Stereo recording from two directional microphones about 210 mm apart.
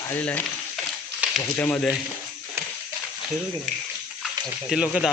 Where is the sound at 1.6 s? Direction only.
5° left (ahead or behind).